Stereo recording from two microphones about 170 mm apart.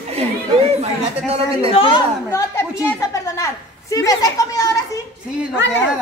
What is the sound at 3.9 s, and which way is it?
Speech, 20° left (ahead or behind).